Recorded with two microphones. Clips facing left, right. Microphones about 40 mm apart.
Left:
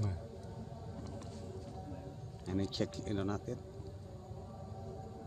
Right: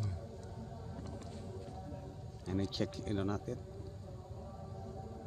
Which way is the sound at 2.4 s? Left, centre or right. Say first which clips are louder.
Even; centre.